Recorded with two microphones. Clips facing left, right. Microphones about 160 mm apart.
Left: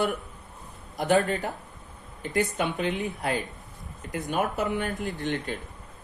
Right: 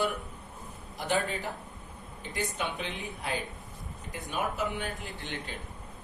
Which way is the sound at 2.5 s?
55° left (ahead or behind).